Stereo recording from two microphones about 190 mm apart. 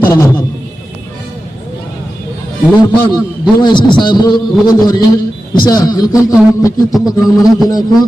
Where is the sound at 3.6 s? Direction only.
25° left (ahead or behind).